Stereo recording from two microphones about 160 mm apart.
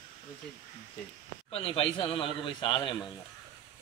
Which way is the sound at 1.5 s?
35° left (ahead or behind).